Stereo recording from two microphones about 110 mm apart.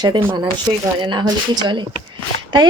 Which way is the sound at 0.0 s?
45° right (ahead or behind).